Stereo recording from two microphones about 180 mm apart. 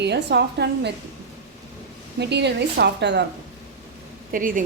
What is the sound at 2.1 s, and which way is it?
A woman's voice, 70° right (ahead or behind).